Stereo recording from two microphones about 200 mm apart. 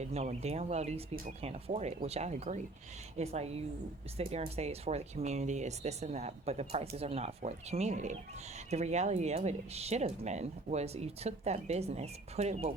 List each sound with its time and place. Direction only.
0.0 s speech: 35° right (ahead or behind)